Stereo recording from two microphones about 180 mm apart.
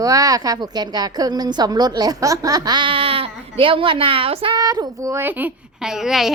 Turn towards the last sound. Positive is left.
turn(degrees=0)  # may be behind; listen again after turning